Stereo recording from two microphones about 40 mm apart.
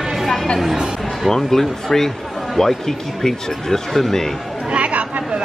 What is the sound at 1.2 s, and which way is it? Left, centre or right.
Speech, centre.